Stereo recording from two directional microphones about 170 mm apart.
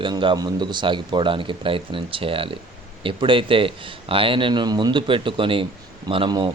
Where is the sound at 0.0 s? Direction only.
30° right (ahead or behind).